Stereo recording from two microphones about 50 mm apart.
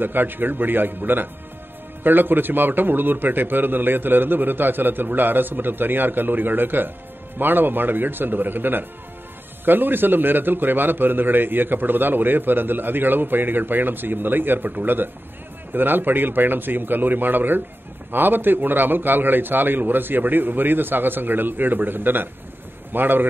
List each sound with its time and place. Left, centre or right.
0.0 s a man's voice: right